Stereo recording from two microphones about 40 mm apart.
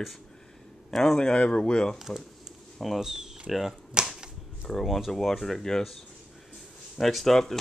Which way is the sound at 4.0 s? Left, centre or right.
Right.